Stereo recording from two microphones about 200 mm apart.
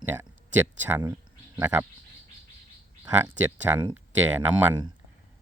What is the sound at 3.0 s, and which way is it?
Speech, 10° right (ahead or behind).